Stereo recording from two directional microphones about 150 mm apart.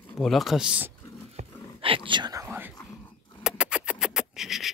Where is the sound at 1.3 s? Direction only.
35° right (ahead or behind); by 2.7 s 15° right (ahead or behind).